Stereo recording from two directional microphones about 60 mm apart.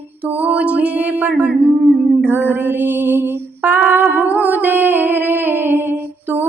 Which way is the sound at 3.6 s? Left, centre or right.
Right.